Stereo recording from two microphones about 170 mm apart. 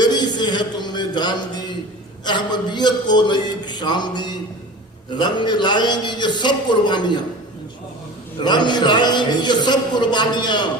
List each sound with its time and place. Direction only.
0.0 s music: 25° left (ahead or behind)
2.2 s a man's voice: 25° left (ahead or behind)
8.4 s a man's voice: 25° left (ahead or behind)